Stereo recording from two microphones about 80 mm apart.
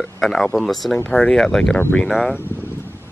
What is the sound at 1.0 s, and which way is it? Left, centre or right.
Speech, centre.